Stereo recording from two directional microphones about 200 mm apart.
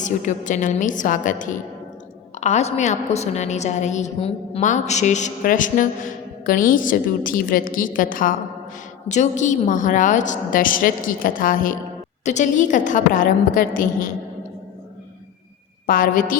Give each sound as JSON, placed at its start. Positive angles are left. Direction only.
{"t": 0.0, "sound": "a woman's voice", "side_deg": 40}
{"t": 15.9, "sound": "a woman's voice", "side_deg": 45}